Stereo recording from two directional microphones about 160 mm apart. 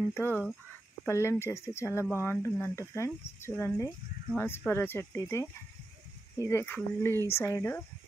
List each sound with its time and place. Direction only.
0.1 s speech: 15° left (ahead or behind)